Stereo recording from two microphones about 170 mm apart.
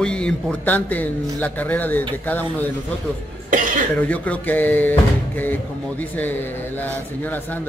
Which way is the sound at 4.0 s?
10° left (ahead or behind).